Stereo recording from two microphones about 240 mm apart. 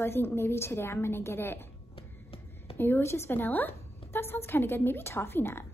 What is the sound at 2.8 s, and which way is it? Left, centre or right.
A woman's voice, centre.